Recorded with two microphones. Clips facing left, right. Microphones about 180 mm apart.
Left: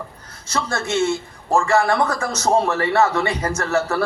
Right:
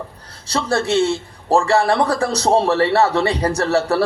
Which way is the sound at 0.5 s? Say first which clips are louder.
Right 5 dB; 35° right (ahead or behind).